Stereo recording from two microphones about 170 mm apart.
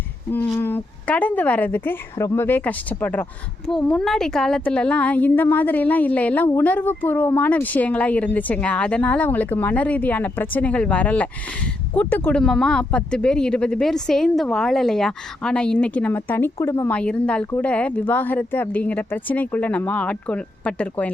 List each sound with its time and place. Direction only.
0.6 s a woman's voice: 10° left (ahead or behind)